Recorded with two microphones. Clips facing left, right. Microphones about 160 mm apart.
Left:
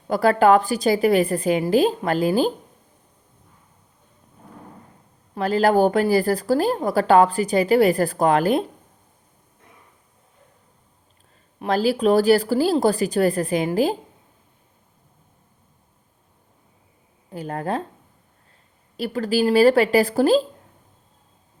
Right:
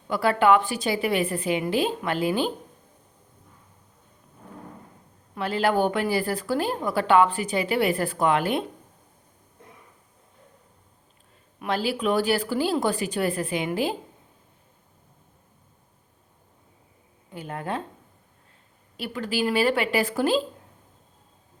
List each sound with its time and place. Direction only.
0.1 s speech: 40° left (ahead or behind)
5.3 s speech: 40° left (ahead or behind)
11.6 s speech: 40° left (ahead or behind)
17.3 s speech: 40° left (ahead or behind)
18.9 s speech: 40° left (ahead or behind)